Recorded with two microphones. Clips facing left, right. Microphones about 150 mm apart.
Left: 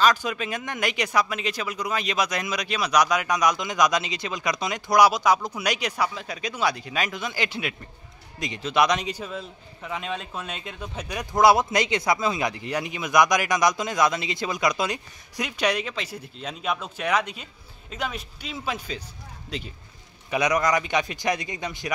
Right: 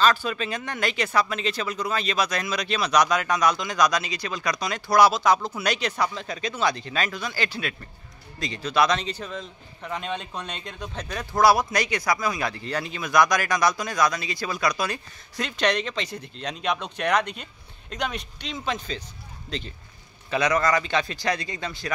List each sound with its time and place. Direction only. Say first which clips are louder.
0.0 s a man's voice: even; 15° left (ahead or behind)
20.2 s a man's voice: even; 15° left (ahead or behind)